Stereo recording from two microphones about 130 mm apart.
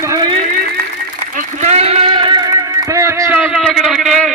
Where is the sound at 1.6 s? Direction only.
60° right (ahead or behind); by 3.5 s 15° right (ahead or behind).